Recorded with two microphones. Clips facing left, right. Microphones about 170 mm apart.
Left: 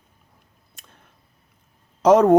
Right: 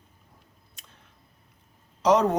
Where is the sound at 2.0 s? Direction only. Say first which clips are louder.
Left 8 dB; 50° left (ahead or behind).